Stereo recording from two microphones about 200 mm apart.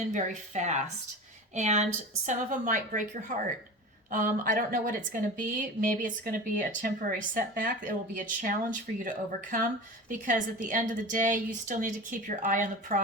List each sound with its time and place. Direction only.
0.1 s a woman's voice: 35° right (ahead or behind)